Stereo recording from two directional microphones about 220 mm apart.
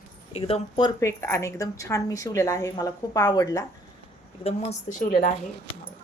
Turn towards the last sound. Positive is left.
turn(degrees=35)  # may be behind; listen again after turning